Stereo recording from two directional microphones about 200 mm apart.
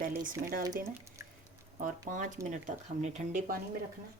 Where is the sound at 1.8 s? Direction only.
40° right (ahead or behind).